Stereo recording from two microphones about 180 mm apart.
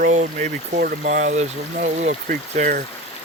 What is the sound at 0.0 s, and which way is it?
Speech, 40° right (ahead or behind).